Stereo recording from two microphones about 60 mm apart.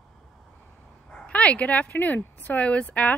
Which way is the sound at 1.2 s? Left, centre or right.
Left.